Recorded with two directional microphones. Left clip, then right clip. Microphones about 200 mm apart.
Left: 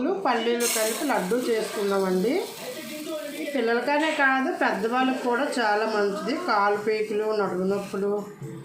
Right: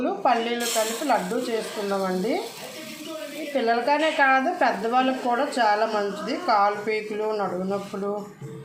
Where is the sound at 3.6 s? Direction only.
25° right (ahead or behind).